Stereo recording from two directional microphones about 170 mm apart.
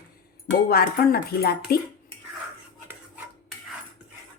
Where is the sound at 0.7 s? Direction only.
65° left (ahead or behind).